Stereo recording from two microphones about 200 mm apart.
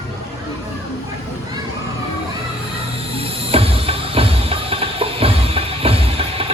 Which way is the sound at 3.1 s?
30° right (ahead or behind).